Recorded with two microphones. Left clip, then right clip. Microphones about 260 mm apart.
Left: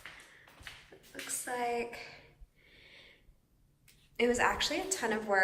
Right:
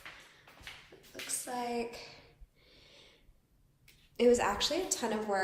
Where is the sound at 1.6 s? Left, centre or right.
Centre.